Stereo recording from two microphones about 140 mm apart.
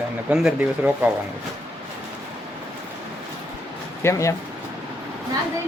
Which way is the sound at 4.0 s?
20° left (ahead or behind).